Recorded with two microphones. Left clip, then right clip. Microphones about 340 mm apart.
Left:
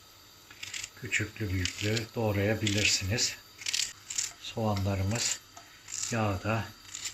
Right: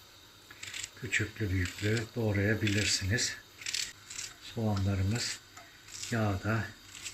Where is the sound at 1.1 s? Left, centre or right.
Centre.